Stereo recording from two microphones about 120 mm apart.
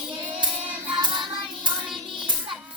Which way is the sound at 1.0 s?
40° right (ahead or behind).